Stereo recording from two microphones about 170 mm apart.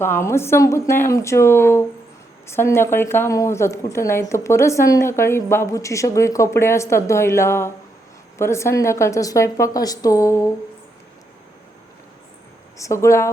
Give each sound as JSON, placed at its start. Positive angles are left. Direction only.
{"t": 0.0, "sound": "a woman's voice", "side_deg": 15}
{"t": 12.7, "sound": "a woman's voice", "side_deg": 15}